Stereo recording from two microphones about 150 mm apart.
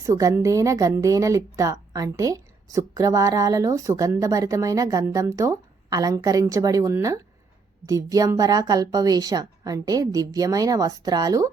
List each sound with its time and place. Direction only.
0.0 s speech: 20° right (ahead or behind)